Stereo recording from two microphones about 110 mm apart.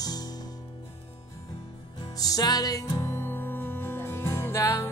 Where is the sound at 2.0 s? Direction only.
35° left (ahead or behind).